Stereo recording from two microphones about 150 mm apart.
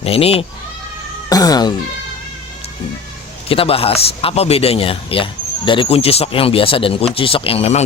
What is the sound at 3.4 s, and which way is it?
A man's voice, 40° left (ahead or behind).